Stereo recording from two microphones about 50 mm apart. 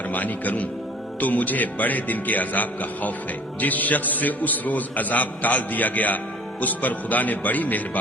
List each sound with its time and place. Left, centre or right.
0.1 s a man's voice: left